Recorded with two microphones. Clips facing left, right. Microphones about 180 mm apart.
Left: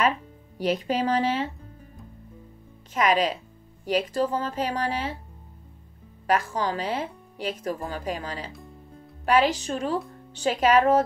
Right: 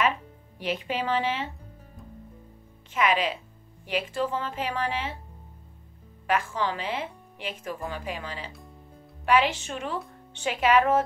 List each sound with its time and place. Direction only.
0.6 s speech: 40° left (ahead or behind)
2.9 s speech: 40° left (ahead or behind)
6.2 s speech: 40° left (ahead or behind)